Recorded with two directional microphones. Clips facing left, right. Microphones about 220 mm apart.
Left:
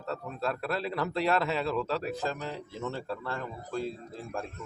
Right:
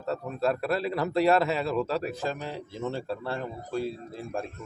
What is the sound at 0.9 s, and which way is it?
Speech, 40° right (ahead or behind).